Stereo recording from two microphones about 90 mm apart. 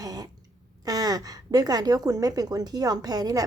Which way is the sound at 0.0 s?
45° right (ahead or behind).